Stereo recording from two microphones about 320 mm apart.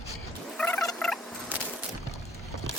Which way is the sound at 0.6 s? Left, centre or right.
Centre.